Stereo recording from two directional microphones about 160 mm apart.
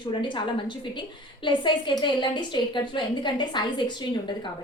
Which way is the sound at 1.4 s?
30° left (ahead or behind).